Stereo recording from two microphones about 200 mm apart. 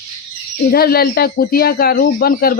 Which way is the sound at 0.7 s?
50° left (ahead or behind).